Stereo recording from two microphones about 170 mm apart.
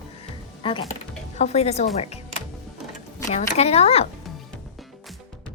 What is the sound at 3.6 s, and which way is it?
Speech, 35° left (ahead or behind).